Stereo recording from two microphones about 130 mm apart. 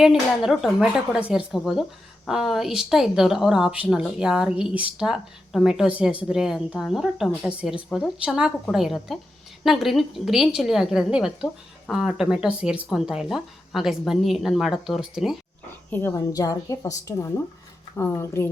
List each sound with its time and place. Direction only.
0.0 s a woman's voice: 5° right (ahead or behind)
15.9 s a woman's voice: 15° left (ahead or behind)
16.1 s a woman's voice: 25° left (ahead or behind)